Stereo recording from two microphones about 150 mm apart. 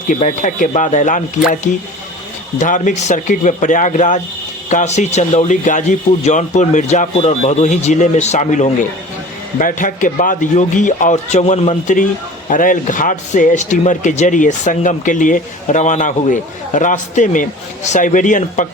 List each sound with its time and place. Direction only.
0.1 s a man's voice: 55° left (ahead or behind)
12.5 s a man's voice: 60° left (ahead or behind)